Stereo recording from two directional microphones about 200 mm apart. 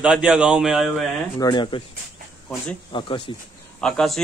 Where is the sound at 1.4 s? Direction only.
25° left (ahead or behind).